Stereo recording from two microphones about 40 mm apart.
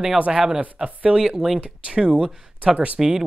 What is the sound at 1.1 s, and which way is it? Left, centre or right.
Speech, centre.